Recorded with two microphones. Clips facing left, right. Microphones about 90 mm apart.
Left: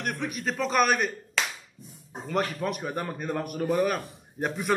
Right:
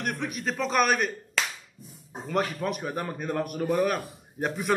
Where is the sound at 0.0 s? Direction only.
Centre (ahead or behind).